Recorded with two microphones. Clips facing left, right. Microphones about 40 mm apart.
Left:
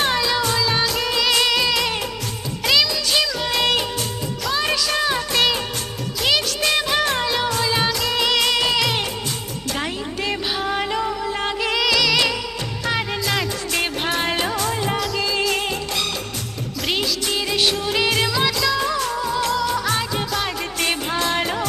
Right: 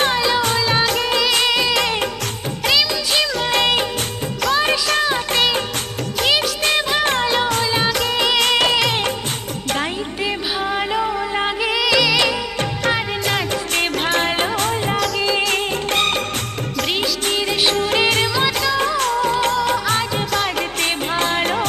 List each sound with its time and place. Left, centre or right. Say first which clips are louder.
0.4 s music: right 3 dB; right
1.5 s music: right 1 dB; right
3.2 s music: right 3 dB; right
7.3 s music: right 3 dB; right
8.4 s music: right 3 dB; right
10.2 s music: right 1 dB; centre
13.2 s music: right 2 dB; right
18.1 s music of bollywood: right 2 dB; right
18.9 s music: right 4 dB; right